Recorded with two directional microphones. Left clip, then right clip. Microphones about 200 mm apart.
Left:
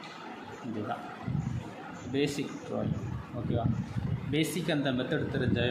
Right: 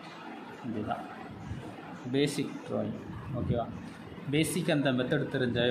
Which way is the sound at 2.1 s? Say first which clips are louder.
Right 1 dB; 25° right (ahead or behind).